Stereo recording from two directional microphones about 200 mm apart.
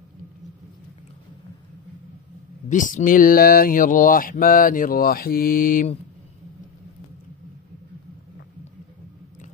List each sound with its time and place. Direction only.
2.7 s speech: 40° left (ahead or behind)